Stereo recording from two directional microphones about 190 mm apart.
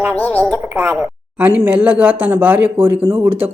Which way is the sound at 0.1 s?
5° left (ahead or behind).